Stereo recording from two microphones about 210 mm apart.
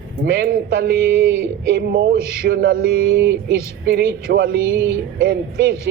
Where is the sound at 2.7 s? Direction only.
70° right (ahead or behind).